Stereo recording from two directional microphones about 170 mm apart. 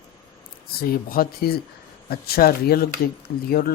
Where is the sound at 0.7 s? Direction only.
60° left (ahead or behind).